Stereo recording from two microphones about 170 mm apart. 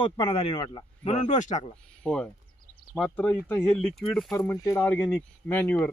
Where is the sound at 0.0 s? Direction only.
30° left (ahead or behind).